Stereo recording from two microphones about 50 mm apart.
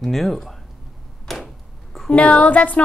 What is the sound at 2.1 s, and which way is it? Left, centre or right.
Speech, left.